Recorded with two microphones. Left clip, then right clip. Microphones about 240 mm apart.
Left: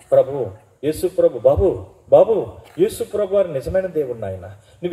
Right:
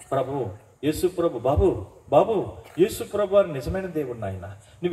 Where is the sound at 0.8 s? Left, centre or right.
Right.